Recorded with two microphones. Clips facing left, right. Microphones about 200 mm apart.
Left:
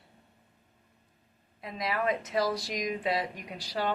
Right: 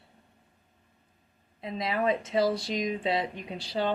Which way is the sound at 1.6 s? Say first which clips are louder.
Right 3 dB; 25° right (ahead or behind).